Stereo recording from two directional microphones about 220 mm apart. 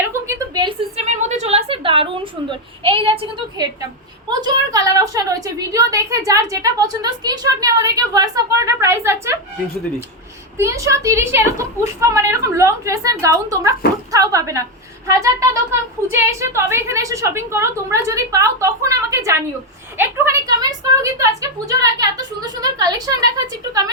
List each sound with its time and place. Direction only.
0.1 s a sound: 15° right (ahead or behind)
4.3 s a woman's voice: 20° right (ahead or behind)
10.6 s a woman's voice: 15° right (ahead or behind)